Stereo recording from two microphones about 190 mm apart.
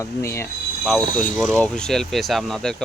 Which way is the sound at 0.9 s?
Centre (ahead or behind).